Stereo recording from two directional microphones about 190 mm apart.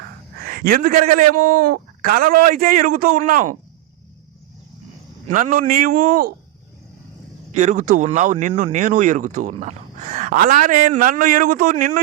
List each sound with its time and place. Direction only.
0.0 s a man's voice: 55° right (ahead or behind)
5.3 s a man's voice: 45° right (ahead or behind)
7.5 s speech: 40° right (ahead or behind)